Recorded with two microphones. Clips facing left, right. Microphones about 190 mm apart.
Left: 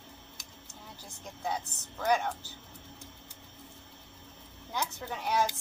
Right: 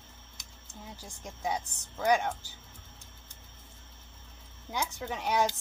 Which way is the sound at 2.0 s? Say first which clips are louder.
Right 2 dB; 15° right (ahead or behind).